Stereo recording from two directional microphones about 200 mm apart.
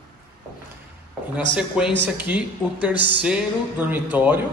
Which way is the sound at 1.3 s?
5° right (ahead or behind).